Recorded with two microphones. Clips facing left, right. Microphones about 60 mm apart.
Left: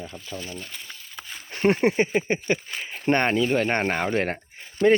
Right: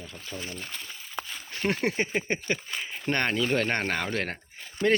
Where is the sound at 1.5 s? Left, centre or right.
Left.